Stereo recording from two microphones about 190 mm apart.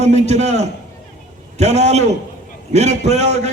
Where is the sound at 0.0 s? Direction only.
35° right (ahead or behind).